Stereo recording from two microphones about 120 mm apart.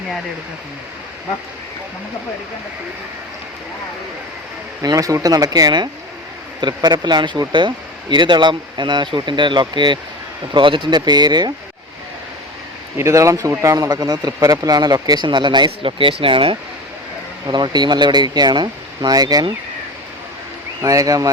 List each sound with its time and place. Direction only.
4.8 s a man's voice: 30° right (ahead or behind)
13.0 s a man's voice: 25° right (ahead or behind); by 16.6 s 50° right (ahead or behind)
17.4 s a man's voice: 35° right (ahead or behind)
20.8 s speech: 30° right (ahead or behind)